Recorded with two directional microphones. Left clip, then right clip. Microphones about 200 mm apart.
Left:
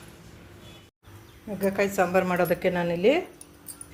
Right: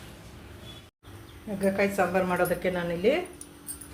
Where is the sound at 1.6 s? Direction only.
35° left (ahead or behind).